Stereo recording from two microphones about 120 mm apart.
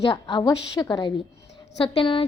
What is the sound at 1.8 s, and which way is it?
Speech, 50° left (ahead or behind).